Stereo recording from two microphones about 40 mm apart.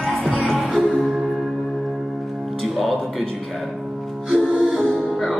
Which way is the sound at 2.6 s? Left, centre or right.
Centre.